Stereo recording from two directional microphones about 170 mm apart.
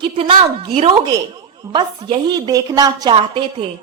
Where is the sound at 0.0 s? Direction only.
30° right (ahead or behind).